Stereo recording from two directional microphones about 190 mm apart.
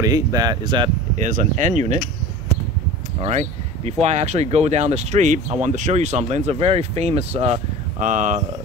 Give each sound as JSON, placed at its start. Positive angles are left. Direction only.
{"t": 0.0, "sound": "speech", "side_deg": -20}
{"t": 1.1, "sound": "speech", "side_deg": -40}
{"t": 3.2, "sound": "speech", "side_deg": -35}